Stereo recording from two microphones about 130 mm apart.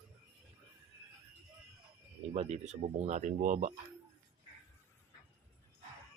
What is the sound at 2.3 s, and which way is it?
Speech, 60° right (ahead or behind).